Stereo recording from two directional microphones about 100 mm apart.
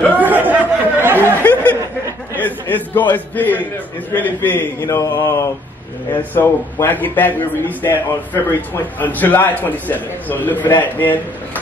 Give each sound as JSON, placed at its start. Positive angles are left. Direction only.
{"t": 0.2, "sound": "a sound", "side_deg": -15}
{"t": 1.4, "sound": "chatter", "side_deg": 15}
{"t": 2.3, "sound": "a man's voice", "side_deg": 20}